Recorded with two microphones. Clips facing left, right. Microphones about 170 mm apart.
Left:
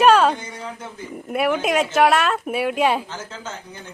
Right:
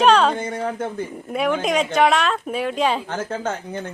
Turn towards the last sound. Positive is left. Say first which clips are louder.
# right 9 dB
turn(degrees=-55)  # may be behind; listen again after turning